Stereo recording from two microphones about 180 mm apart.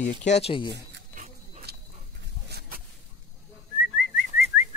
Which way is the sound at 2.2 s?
65° right (ahead or behind).